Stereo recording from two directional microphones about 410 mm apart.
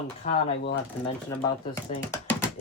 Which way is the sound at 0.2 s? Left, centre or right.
Centre.